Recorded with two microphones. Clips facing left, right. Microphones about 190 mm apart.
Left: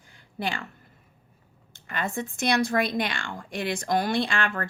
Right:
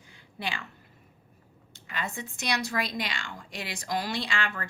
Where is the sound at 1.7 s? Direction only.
50° left (ahead or behind).